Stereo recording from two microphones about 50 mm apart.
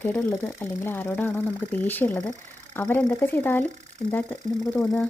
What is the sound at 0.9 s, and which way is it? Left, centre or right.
A woman's voice, left.